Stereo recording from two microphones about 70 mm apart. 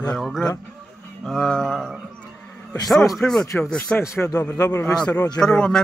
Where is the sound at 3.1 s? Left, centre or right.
Centre.